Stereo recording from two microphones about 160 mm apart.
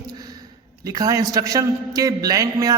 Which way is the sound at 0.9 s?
20° right (ahead or behind).